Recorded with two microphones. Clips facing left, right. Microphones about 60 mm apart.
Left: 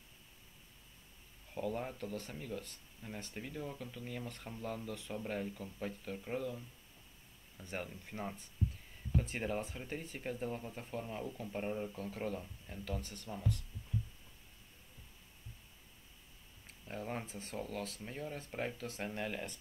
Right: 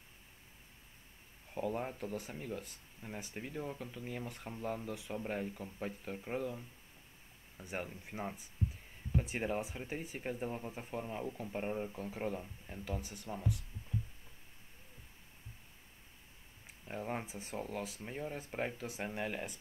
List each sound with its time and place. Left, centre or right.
1.5 s speech: centre
16.6 s speech: centre